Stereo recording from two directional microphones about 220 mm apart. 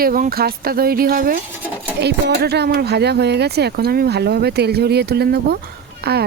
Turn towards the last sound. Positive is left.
turn(degrees=-45)  # may be behind; listen again after turning